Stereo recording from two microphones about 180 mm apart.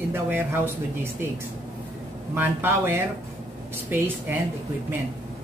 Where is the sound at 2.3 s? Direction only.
10° right (ahead or behind).